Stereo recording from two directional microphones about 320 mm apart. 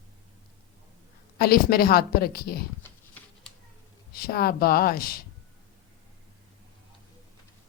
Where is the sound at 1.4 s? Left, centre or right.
Left.